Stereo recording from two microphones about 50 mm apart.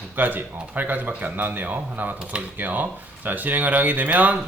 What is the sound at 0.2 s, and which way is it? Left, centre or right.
Speech, right.